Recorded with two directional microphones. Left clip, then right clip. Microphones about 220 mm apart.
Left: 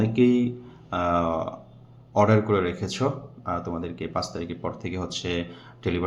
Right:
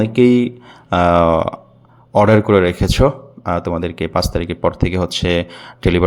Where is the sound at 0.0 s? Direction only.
45° right (ahead or behind).